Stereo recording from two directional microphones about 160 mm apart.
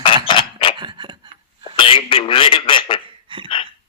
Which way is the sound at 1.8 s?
35° left (ahead or behind).